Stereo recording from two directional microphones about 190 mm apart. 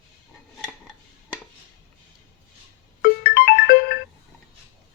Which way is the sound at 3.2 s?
55° left (ahead or behind).